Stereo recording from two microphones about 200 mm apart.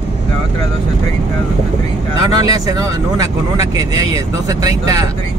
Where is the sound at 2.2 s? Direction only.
20° right (ahead or behind).